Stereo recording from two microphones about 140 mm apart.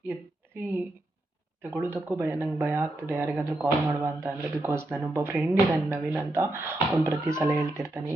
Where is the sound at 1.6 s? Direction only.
15° right (ahead or behind).